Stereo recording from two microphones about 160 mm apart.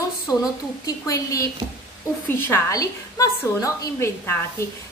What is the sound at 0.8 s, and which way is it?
A woman's voice, 20° left (ahead or behind).